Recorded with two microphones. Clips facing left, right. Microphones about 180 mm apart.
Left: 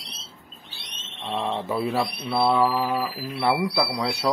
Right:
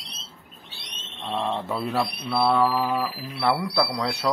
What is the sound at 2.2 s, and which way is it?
Speech, 10° left (ahead or behind).